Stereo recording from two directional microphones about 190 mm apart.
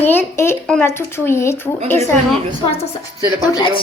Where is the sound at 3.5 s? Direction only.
25° left (ahead or behind).